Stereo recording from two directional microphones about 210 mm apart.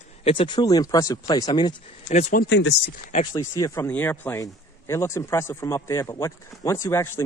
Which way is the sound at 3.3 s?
15° left (ahead or behind).